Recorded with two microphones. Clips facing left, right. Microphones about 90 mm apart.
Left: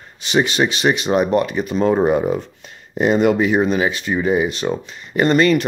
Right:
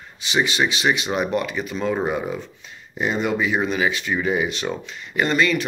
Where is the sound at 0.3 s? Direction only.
50° left (ahead or behind).